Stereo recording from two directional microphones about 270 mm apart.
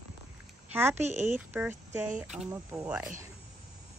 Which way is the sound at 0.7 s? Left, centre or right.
Centre.